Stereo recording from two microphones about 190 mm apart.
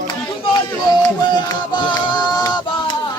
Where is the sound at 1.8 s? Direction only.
20° left (ahead or behind).